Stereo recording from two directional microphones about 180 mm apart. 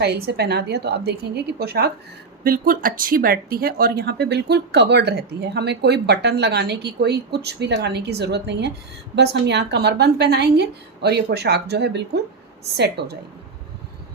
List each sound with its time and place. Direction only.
0.0 s a woman's voice: 65° right (ahead or behind)